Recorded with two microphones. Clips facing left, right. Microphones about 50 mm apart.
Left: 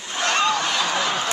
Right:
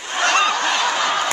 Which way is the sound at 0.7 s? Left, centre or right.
Right.